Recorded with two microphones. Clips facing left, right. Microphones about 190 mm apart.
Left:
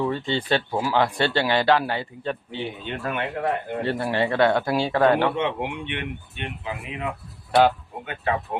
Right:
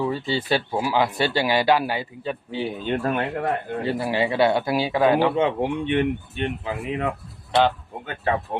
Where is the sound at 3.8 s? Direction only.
5° right (ahead or behind).